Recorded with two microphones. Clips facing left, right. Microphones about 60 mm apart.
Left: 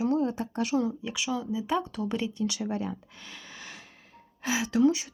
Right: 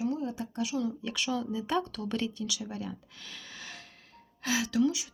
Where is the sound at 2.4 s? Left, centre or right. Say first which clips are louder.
Left 6 dB; left.